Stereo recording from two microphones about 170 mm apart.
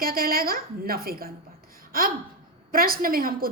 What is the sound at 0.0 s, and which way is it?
A woman's voice, 60° right (ahead or behind).